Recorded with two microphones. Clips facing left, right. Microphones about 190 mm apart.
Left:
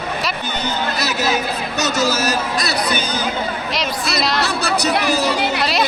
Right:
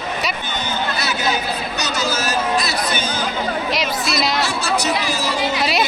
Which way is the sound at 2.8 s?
35° left (ahead or behind).